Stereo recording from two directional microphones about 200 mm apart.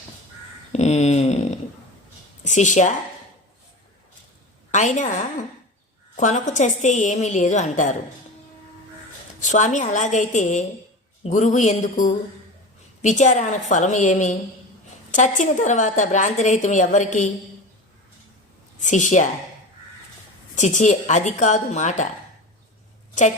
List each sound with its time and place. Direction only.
0.7 s a sound: 35° left (ahead or behind)
2.5 s a woman's voice: 35° left (ahead or behind)
4.7 s a woman's voice: 35° left (ahead or behind)
9.4 s a woman's voice: 35° left (ahead or behind)
18.8 s a woman's voice: 40° left (ahead or behind)
20.6 s a woman's voice: 35° left (ahead or behind)